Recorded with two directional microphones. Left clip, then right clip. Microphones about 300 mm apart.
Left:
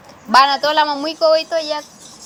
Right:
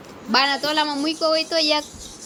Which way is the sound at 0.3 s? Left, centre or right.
Centre.